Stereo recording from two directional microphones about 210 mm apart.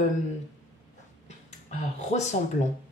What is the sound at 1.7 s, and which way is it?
Speech, 35° left (ahead or behind).